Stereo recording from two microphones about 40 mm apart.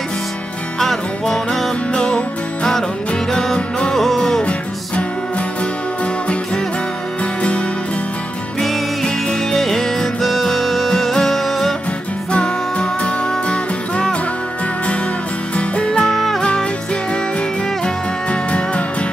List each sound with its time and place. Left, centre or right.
0.7 s music: centre
1.9 s music: left
3.9 s music: centre
4.2 s music: centre
8.5 s music: centre
12.3 s music: left
15.5 s music: left
15.9 s music: centre
18.3 s music: left